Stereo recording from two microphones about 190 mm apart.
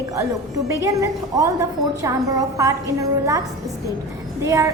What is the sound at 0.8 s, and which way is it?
A woman's voice, 15° right (ahead or behind).